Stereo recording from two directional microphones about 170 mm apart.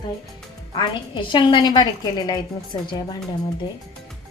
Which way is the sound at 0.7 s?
30° left (ahead or behind).